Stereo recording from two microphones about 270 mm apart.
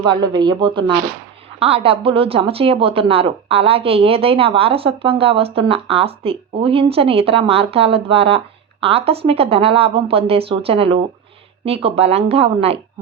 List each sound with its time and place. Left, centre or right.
0.0 s a woman's voice: centre